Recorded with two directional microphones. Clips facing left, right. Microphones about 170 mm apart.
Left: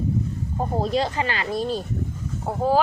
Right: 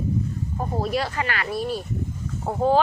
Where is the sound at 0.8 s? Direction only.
25° left (ahead or behind).